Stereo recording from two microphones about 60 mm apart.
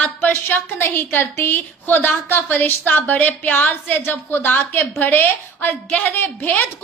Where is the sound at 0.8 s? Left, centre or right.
Left.